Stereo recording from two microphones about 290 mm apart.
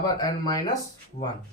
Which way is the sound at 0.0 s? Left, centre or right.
Centre.